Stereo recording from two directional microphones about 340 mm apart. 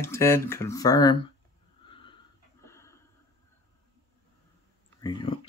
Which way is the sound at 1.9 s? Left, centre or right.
Centre.